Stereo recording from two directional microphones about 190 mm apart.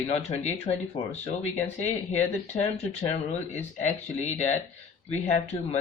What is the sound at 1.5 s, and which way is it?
Speech, 10° left (ahead or behind).